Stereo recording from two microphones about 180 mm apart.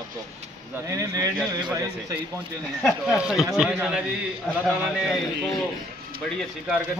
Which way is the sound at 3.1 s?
5° right (ahead or behind).